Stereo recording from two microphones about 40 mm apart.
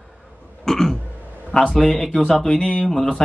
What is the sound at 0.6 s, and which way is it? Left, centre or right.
Speech, centre.